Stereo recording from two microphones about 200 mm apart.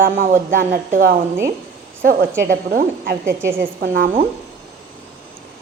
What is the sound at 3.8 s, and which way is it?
Speech, 45° right (ahead or behind).